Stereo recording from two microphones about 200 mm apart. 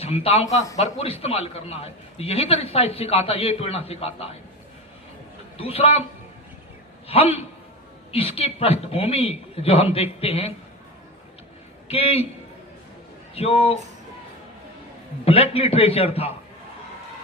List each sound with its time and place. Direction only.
0.0 s a man's voice: 30° left (ahead or behind)
5.5 s a man's voice: 30° left (ahead or behind)
7.1 s a man's voice: 30° left (ahead or behind)
11.9 s a man's voice: 30° left (ahead or behind)
13.3 s a man's voice: 30° left (ahead or behind)
15.2 s a man's voice: 30° left (ahead or behind)